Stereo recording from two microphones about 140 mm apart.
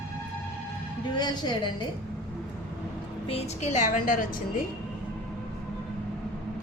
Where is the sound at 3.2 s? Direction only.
45° left (ahead or behind); by 4.3 s 75° left (ahead or behind).